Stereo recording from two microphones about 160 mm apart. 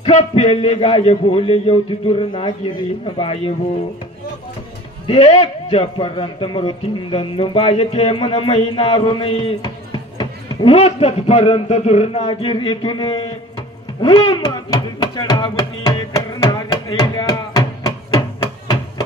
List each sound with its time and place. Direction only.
0.0 s a man's voice: 40° left (ahead or behind)
5.0 s a man's voice: 35° left (ahead or behind)
14.0 s a sound: 30° left (ahead or behind)